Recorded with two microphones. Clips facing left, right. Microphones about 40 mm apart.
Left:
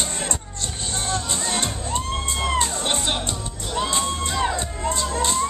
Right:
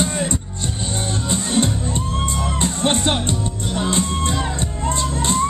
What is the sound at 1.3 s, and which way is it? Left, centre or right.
Music, right.